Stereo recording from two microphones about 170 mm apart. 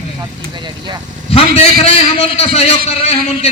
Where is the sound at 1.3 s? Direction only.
35° left (ahead or behind).